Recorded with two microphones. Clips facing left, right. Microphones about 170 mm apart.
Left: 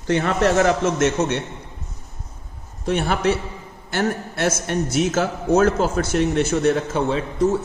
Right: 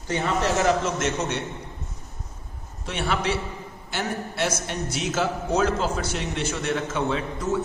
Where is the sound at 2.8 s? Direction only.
45° left (ahead or behind).